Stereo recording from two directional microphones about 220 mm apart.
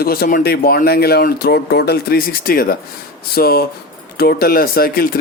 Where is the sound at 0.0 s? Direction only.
45° left (ahead or behind).